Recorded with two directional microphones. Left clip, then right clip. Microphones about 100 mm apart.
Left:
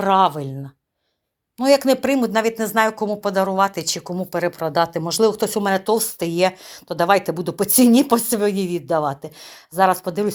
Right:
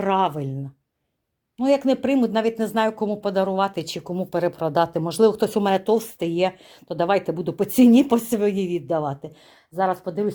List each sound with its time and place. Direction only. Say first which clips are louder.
0.0 s speech: left 5 dB; 20° right (ahead or behind)
1.5 s speech: left 4 dB; 5° right (ahead or behind); by 6.1 s 30° right (ahead or behind)
6.3 s speech: left 4 dB; 15° right (ahead or behind)
9.7 s speech: left 6 dB; 5° left (ahead or behind)